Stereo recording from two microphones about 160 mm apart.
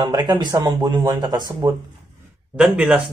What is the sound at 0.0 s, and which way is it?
Speech, 25° right (ahead or behind).